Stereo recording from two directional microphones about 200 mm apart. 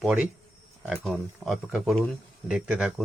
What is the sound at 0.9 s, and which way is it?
Speech, centre (ahead or behind).